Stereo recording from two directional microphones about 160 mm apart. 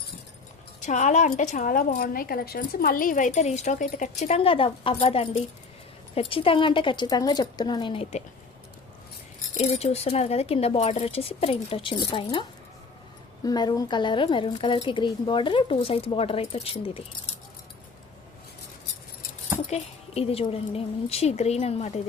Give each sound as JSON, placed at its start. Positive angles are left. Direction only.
{"t": 0.8, "sound": "a woman's voice", "side_deg": 50}
{"t": 9.6, "sound": "speech", "side_deg": 40}
{"t": 19.7, "sound": "speech", "side_deg": 40}